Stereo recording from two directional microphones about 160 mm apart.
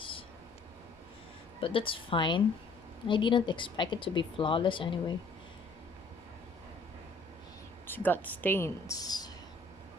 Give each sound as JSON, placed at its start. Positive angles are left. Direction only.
{"t": 0.0, "sound": "a sound", "side_deg": 35}
{"t": 1.6, "sound": "speech", "side_deg": 35}
{"t": 7.9, "sound": "speech", "side_deg": 10}